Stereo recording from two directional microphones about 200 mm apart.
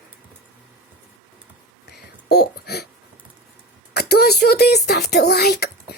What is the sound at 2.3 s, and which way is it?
Speech, 55° left (ahead or behind).